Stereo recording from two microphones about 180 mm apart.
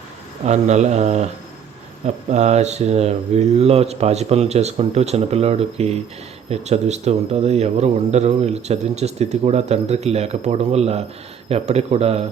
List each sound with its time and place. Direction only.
0.4 s speech: 40° right (ahead or behind)